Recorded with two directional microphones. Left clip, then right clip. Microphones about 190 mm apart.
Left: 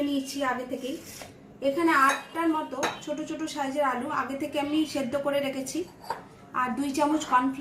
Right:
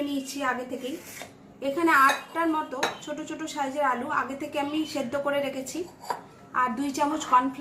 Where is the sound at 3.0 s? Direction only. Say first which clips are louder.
Left 2 dB; 5° left (ahead or behind).